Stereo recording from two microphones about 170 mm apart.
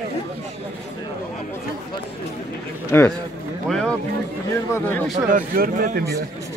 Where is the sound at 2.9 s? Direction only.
10° left (ahead or behind).